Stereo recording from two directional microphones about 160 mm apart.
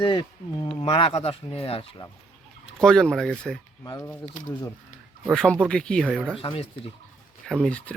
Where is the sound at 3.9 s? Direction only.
15° left (ahead or behind).